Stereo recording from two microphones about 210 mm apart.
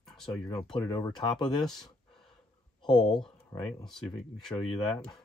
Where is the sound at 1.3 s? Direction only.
Centre (ahead or behind).